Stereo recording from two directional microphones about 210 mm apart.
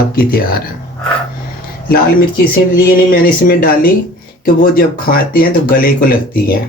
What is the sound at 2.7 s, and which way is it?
Speech, 40° left (ahead or behind).